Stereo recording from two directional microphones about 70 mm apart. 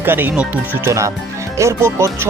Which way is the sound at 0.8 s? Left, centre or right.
Right.